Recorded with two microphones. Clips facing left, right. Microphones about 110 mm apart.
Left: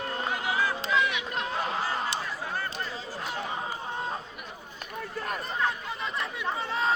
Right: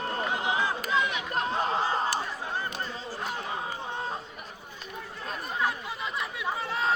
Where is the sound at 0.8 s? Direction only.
30° right (ahead or behind).